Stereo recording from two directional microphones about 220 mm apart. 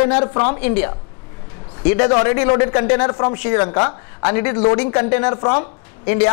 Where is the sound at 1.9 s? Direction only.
20° left (ahead or behind).